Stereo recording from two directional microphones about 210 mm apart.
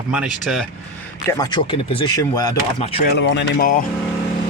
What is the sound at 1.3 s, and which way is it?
Speech, 20° left (ahead or behind).